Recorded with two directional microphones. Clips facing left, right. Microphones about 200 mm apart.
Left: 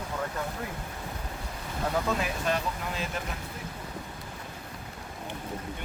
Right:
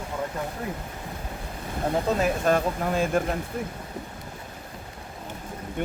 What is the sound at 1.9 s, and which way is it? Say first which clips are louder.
Speech: right 6 dB; 40° right (ahead or behind).